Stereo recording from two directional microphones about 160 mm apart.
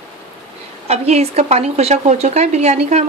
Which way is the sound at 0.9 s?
40° right (ahead or behind).